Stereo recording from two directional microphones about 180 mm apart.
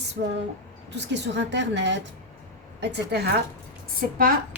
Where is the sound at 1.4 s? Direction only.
75° right (ahead or behind).